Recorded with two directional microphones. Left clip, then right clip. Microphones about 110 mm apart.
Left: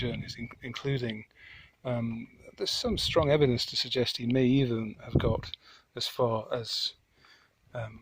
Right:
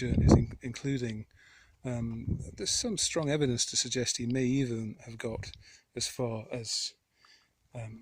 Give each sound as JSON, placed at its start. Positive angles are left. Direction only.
{"t": 0.0, "sound": "speech", "side_deg": -55}